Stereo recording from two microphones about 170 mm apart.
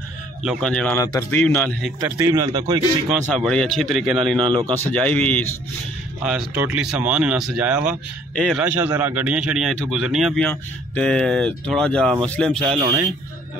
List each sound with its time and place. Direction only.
0.4 s speech: centre (ahead or behind)
2.0 s speech: 15° right (ahead or behind)
3.1 s speech: centre (ahead or behind)
4.4 s speech: 30° right (ahead or behind)
4.8 s speech: 10° left (ahead or behind)
6.2 s speech: 5° right (ahead or behind)
8.6 s speech: 10° right (ahead or behind)